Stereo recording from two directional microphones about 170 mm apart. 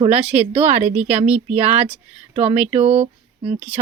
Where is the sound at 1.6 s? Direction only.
40° right (ahead or behind).